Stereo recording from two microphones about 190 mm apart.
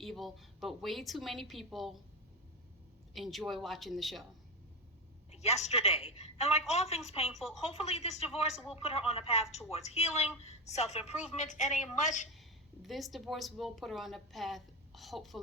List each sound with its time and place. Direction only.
0.0 s a woman's voice: centre (ahead or behind)
3.2 s a woman's voice: centre (ahead or behind)
5.3 s speech: 35° left (ahead or behind)
12.8 s a woman's voice: centre (ahead or behind)